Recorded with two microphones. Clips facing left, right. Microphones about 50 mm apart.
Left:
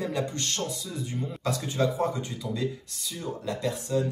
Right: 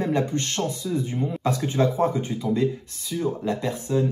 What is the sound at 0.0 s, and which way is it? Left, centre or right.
Speech, right.